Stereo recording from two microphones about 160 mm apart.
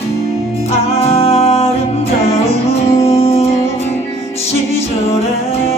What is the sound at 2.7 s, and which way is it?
Music, 40° left (ahead or behind).